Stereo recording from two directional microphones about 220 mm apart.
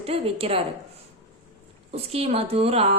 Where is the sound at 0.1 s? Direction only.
25° right (ahead or behind).